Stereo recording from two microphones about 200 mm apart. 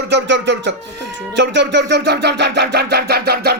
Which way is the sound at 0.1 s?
60° right (ahead or behind).